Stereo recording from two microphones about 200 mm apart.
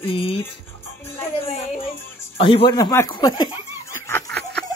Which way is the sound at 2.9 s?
15° left (ahead or behind).